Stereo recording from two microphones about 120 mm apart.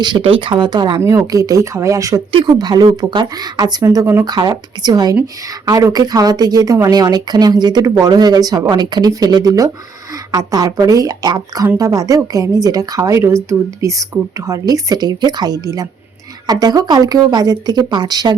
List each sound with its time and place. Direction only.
0.0 s a woman's voice: 45° right (ahead or behind); by 2.2 s 30° right (ahead or behind)
2.3 s speech: 40° right (ahead or behind)
3.9 s a woman's voice: 20° right (ahead or behind)
4.3 s a woman's voice: 35° right (ahead or behind)